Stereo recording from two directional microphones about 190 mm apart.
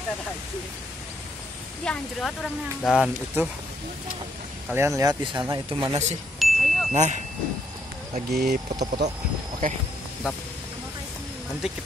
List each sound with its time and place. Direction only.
1.9 s speech: 5° left (ahead or behind)
4.6 s speech: 15° right (ahead or behind)
6.4 s chime: centre (ahead or behind)
6.9 s speech: 35° right (ahead or behind)
8.3 s speech: 55° right (ahead or behind)
9.6 s speech: 45° right (ahead or behind)
11.6 s speech: 5° right (ahead or behind)